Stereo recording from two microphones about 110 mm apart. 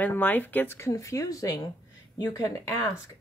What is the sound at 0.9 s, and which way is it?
A woman's voice, 30° left (ahead or behind).